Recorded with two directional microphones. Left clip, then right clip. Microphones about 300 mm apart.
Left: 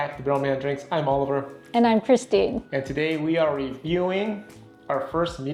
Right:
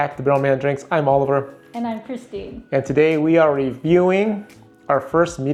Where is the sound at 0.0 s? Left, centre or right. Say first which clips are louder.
Right 6 dB; right.